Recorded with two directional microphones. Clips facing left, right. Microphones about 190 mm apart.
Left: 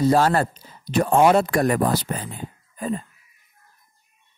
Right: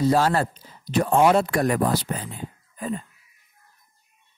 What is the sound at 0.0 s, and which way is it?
Speech, 50° left (ahead or behind).